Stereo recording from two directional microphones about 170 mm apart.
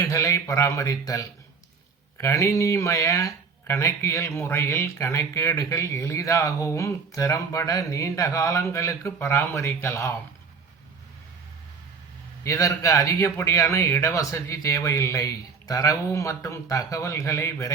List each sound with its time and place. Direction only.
0.0 s speech: 15° left (ahead or behind)
12.4 s speech: 20° left (ahead or behind)